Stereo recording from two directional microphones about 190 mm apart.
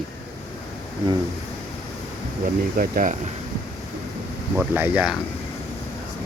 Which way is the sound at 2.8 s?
45° right (ahead or behind).